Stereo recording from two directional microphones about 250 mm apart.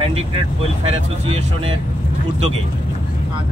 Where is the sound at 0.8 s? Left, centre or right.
Right.